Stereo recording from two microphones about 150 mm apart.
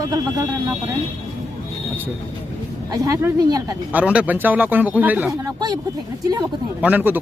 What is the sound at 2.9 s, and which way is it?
Speech, 25° right (ahead or behind).